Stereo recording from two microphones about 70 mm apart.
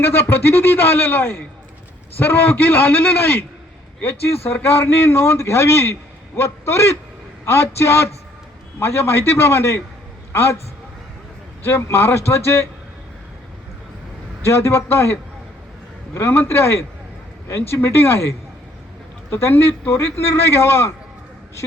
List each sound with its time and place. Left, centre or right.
0.0 s a man's voice: left
11.6 s a man's voice: left
14.4 s a man's voice: left